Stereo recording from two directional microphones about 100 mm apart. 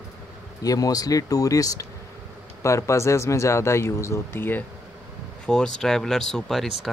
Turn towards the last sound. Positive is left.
turn(degrees=5)  # may be behind; listen again after turning